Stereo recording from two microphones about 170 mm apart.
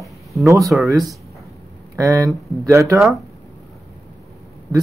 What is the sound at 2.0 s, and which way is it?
Speech, 20° right (ahead or behind).